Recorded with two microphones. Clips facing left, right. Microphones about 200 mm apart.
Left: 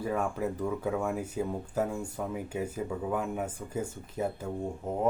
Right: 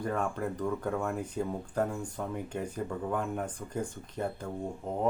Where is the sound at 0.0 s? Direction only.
5° left (ahead or behind).